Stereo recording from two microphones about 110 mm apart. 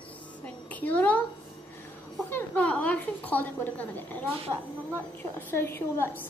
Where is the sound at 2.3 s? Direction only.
15° left (ahead or behind).